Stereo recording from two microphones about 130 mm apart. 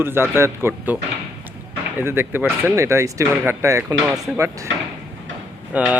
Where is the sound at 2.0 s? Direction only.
15° right (ahead or behind).